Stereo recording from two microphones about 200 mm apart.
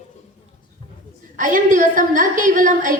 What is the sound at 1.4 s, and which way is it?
A woman's voice, 40° right (ahead or behind).